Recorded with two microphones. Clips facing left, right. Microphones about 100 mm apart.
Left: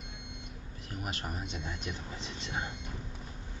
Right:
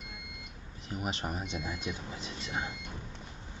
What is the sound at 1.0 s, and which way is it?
Speech, 25° right (ahead or behind).